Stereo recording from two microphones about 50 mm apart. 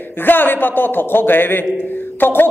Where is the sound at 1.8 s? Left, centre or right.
Left.